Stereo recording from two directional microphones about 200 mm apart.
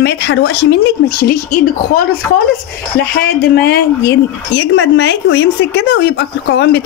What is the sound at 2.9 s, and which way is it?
Speech, 50° left (ahead or behind).